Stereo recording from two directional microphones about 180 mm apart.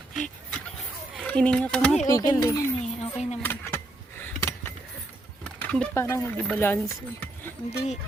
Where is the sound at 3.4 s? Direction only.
10° left (ahead or behind).